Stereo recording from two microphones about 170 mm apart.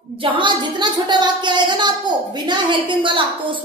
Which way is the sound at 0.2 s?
30° right (ahead or behind).